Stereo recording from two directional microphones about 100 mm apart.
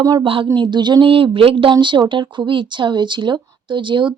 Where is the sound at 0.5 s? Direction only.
50° right (ahead or behind).